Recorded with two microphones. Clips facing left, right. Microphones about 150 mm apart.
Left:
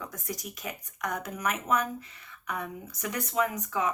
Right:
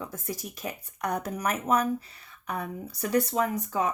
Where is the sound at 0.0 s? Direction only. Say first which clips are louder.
Right 2 dB; 30° right (ahead or behind).